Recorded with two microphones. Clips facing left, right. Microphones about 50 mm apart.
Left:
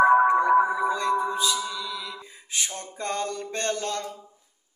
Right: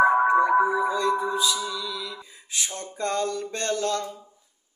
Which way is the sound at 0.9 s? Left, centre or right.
Left.